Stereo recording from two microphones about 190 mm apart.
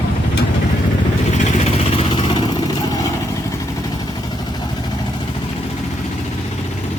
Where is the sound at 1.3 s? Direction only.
35° left (ahead or behind).